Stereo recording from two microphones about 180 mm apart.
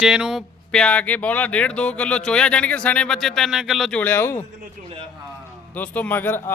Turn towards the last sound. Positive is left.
turn(degrees=10)  # may be behind; listen again after turning